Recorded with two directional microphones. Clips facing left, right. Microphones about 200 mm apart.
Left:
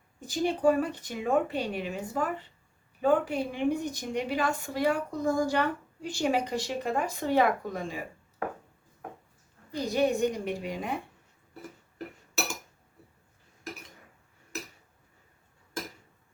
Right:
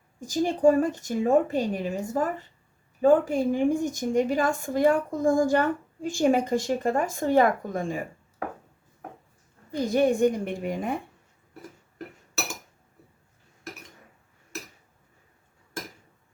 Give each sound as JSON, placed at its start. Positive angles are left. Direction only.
{"t": 0.3, "sound": "a woman's voice", "side_deg": -45}
{"t": 9.8, "sound": "a woman's voice", "side_deg": -50}